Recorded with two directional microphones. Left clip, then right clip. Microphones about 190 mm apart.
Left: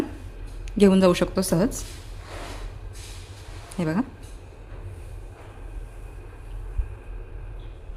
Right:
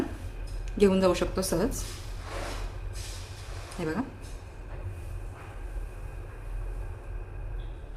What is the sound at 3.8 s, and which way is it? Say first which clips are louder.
Speech: left 5 dB; 45° left (ahead or behind).